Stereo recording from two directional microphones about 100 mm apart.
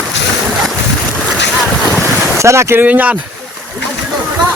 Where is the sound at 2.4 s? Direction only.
30° right (ahead or behind).